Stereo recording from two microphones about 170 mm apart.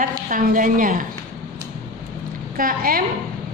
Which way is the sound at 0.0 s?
50° right (ahead or behind).